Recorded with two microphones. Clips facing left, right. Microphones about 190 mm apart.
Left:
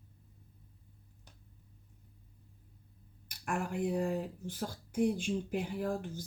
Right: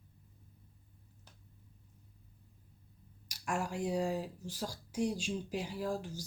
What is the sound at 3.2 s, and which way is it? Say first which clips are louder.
Speech: even; 55° left (ahead or behind).